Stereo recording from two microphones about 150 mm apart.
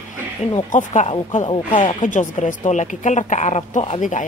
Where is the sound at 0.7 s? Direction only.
50° left (ahead or behind).